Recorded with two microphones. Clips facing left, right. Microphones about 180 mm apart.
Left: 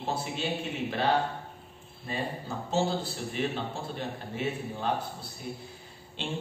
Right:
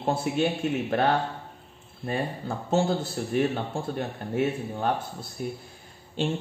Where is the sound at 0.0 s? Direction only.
55° right (ahead or behind).